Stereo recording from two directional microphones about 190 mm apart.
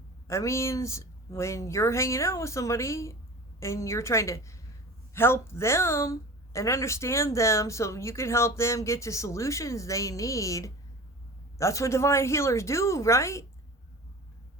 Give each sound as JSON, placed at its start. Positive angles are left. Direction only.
{"t": 0.3, "sound": "a woman's voice", "side_deg": 15}